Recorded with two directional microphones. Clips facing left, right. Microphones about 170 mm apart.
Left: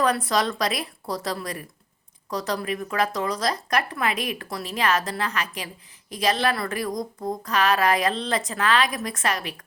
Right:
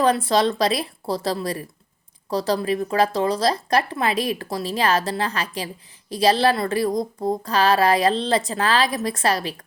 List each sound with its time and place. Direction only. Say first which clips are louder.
0.0 s a woman's voice: right 4 dB; 30° right (ahead or behind)